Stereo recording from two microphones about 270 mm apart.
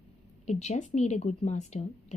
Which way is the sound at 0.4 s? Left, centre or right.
Left.